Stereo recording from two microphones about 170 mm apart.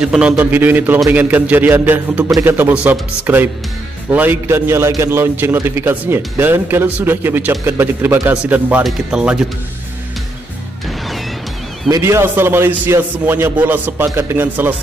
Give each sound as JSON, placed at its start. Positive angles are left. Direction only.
{"t": 0.0, "sound": "a man's voice", "side_deg": -5}
{"t": 11.9, "sound": "a man's voice", "side_deg": -15}